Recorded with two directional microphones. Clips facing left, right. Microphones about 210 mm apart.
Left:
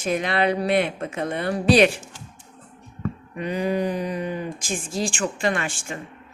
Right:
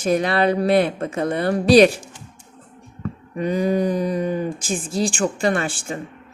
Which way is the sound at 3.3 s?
40° right (ahead or behind).